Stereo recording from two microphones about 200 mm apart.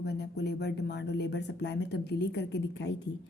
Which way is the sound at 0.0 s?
55° left (ahead or behind).